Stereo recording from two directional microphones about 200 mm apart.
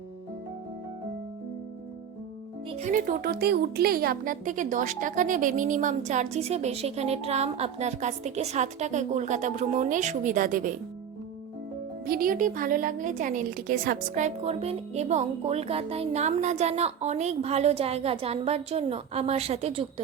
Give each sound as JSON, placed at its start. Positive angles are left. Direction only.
{"t": 2.6, "sound": "speech", "side_deg": -35}
{"t": 12.0, "sound": "speech", "side_deg": -45}